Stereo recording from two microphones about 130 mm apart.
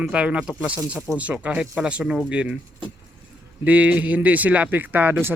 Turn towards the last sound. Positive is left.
turn(degrees=-15)  # may be behind; listen again after turning